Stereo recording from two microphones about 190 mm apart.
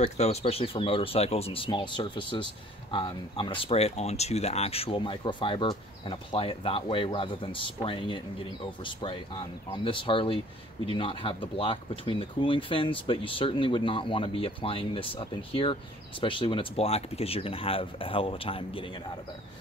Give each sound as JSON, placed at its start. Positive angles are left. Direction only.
{"t": 0.0, "sound": "speech", "side_deg": 35}